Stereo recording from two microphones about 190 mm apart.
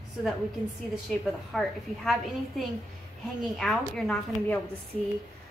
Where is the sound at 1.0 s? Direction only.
Centre (ahead or behind).